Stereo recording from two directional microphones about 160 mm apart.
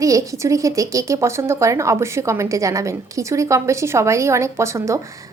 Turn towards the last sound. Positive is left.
turn(degrees=-20)  # may be behind; listen again after turning